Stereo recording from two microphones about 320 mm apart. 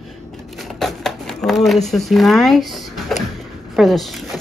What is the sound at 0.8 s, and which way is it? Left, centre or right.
Speech, centre.